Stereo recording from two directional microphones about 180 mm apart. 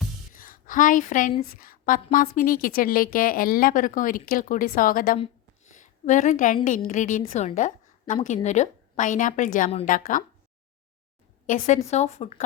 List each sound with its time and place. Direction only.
0.3 s a sound: 50° left (ahead or behind)
1.4 s a woman's voice: 55° left (ahead or behind)
11.4 s a woman's voice: 45° left (ahead or behind)